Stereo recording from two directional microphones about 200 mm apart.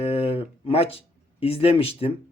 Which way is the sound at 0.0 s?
30° left (ahead or behind).